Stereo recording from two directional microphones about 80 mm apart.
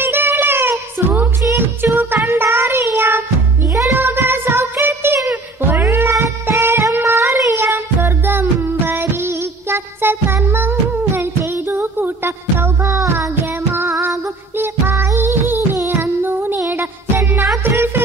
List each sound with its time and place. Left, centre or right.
0.0 s music: right
2.2 s child singing: right
5.3 s music: right
7.1 s child singing: right
7.4 s music: right
13.7 s child singing: right
14.6 s music: right